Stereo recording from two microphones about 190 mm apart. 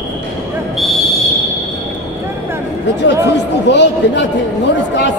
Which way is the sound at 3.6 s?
65° left (ahead or behind).